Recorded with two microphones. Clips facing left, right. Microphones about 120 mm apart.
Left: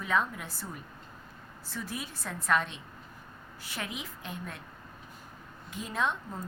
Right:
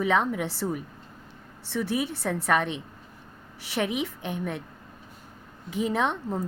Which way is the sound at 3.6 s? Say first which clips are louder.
Right 12 dB; 80° right.